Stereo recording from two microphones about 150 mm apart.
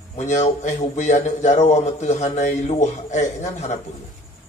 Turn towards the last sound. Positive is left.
turn(degrees=50)  # may be behind; listen again after turning